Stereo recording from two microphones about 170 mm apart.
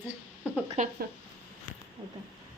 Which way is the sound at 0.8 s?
45° right (ahead or behind).